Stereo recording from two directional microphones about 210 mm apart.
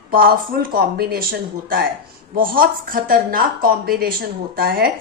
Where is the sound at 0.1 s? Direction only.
45° right (ahead or behind).